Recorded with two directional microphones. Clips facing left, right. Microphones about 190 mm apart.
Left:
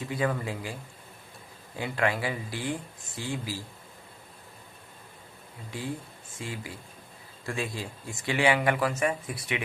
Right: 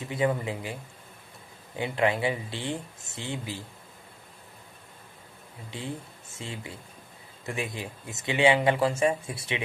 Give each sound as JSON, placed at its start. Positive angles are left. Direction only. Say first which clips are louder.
{"t": 0.0, "sound": "speech", "louder": "right 2 dB", "side_deg": -20}
{"t": 1.8, "sound": "speech", "louder": "right 3 dB", "side_deg": -20}
{"t": 5.7, "sound": "speech", "louder": "left 1 dB", "side_deg": -25}